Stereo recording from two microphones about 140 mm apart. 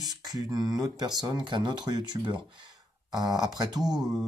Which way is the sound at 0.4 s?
25° right (ahead or behind).